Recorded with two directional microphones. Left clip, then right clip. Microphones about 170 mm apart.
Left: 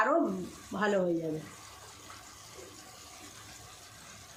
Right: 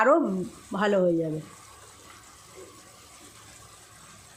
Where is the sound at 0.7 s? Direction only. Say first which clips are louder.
Right 5 dB; 40° right (ahead or behind).